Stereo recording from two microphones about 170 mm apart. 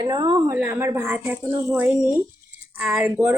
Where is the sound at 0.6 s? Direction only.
15° right (ahead or behind).